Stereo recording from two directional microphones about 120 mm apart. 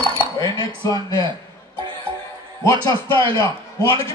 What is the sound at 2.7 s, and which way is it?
Speech, 45° right (ahead or behind).